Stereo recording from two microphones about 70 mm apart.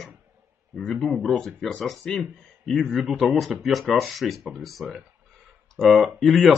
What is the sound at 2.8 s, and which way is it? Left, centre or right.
Speech, centre.